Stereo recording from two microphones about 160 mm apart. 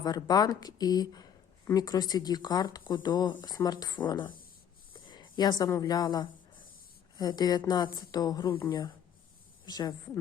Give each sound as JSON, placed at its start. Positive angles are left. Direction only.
{"t": 0.0, "sound": "speech", "side_deg": 25}
{"t": 9.6, "sound": "a woman's voice", "side_deg": 25}